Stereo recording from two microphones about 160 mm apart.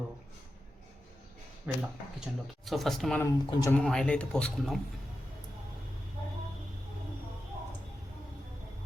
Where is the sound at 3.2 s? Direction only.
15° left (ahead or behind).